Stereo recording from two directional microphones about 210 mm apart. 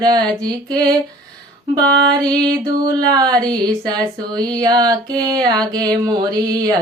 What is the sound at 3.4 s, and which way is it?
Mantra, 20° right (ahead or behind).